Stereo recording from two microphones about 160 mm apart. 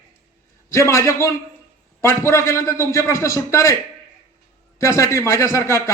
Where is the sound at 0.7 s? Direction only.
20° left (ahead or behind).